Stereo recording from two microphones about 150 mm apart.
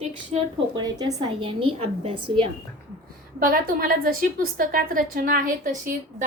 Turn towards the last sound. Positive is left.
turn(degrees=-60)  # may be behind; listen again after turning